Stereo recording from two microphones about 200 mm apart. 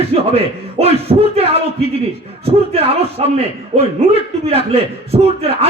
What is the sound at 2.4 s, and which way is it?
A man's voice, 30° right (ahead or behind).